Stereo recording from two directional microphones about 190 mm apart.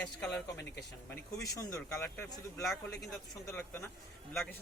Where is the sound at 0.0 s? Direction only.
5° left (ahead or behind).